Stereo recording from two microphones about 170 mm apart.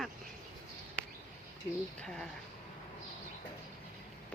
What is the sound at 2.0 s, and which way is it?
Speech, 5° left (ahead or behind).